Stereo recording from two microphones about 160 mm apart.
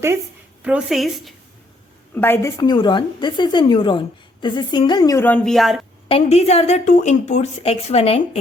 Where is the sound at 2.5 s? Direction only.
25° left (ahead or behind); by 5.5 s 10° left (ahead or behind).